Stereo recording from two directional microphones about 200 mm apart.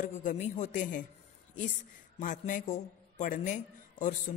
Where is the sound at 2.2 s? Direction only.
40° left (ahead or behind).